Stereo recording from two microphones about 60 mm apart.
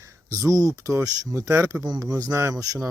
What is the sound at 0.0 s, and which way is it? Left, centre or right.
Speech, right.